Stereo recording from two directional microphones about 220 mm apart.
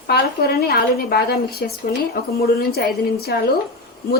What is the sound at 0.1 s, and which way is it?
A woman's voice, 45° left (ahead or behind).